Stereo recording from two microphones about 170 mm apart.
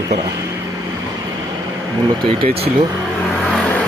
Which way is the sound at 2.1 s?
30° right (ahead or behind).